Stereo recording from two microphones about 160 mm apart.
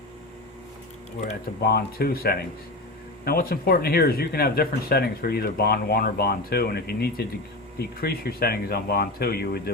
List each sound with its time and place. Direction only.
1.6 s speech: 75° left (ahead or behind)